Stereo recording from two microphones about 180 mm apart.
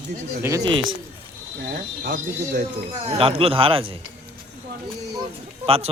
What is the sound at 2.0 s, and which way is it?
Speech, 50° right (ahead or behind).